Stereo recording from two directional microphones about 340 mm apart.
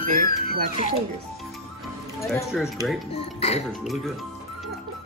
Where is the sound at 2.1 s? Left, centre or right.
Centre.